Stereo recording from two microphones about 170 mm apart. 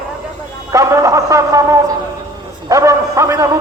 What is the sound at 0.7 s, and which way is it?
Music, 20° right (ahead or behind).